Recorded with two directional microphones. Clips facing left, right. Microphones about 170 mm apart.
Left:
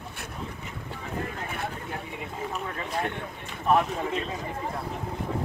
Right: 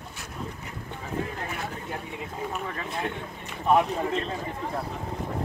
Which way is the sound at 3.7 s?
Centre (ahead or behind).